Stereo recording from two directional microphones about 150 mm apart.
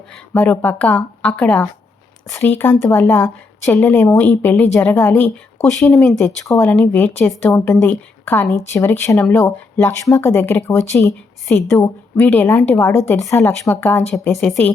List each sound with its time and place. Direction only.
0.3 s a woman's voice: 10° left (ahead or behind)
6.1 s a woman's voice: 15° left (ahead or behind)